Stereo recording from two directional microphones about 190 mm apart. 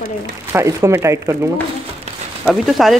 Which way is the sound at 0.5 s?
15° right (ahead or behind).